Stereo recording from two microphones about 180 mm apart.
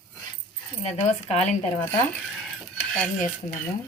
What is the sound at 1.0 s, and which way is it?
Speech, 40° left (ahead or behind).